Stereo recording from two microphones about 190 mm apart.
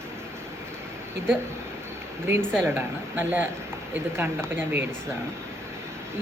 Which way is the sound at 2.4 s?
5° left (ahead or behind).